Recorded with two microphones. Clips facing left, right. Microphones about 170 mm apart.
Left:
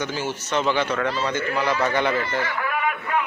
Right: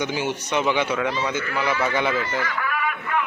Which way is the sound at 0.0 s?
15° right (ahead or behind).